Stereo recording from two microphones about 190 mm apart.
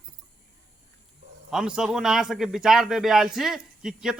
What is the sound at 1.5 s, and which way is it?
A man's voice, 5° right (ahead or behind).